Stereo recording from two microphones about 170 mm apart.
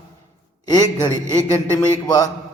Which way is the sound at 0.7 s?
25° left (ahead or behind).